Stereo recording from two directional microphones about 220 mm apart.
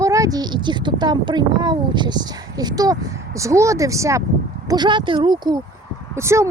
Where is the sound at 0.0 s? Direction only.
15° right (ahead or behind).